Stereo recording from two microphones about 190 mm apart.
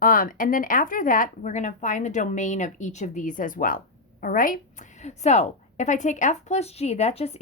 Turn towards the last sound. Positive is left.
turn(degrees=35)  # may be behind; listen again after turning